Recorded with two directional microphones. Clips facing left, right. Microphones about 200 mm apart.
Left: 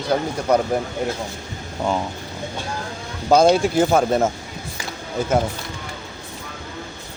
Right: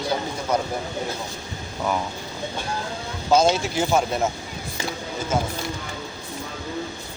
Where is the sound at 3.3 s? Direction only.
55° left (ahead or behind).